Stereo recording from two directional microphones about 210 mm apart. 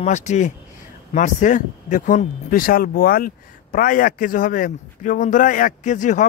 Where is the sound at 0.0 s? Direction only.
35° left (ahead or behind).